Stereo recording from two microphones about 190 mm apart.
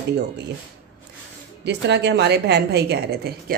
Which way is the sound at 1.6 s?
60° right (ahead or behind).